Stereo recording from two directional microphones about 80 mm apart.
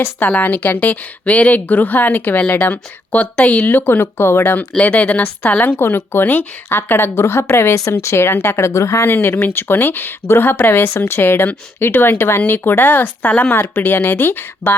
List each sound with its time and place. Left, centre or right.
0.2 s a woman's voice: left